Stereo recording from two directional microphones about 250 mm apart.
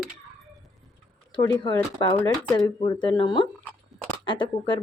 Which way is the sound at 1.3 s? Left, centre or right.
Centre.